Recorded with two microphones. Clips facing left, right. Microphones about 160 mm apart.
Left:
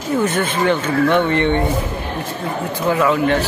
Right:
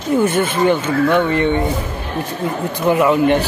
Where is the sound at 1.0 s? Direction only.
10° right (ahead or behind).